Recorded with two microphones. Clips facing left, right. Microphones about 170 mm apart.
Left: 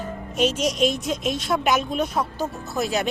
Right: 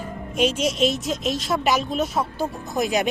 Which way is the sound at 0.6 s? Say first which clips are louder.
Even; 45° left (ahead or behind).